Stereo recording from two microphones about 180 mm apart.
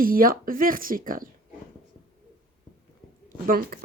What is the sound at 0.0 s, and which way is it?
Speech, 55° right (ahead or behind).